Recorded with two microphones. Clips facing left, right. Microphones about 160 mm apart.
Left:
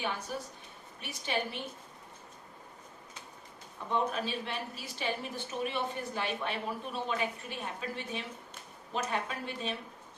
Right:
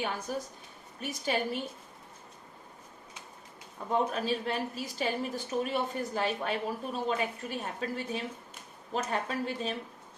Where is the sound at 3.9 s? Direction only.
40° right (ahead or behind).